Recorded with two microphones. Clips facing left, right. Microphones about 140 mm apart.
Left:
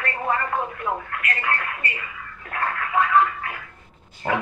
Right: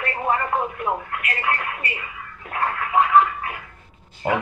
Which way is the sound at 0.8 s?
25° right (ahead or behind).